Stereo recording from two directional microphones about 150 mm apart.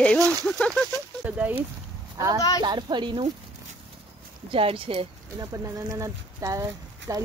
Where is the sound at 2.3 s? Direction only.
25° left (ahead or behind).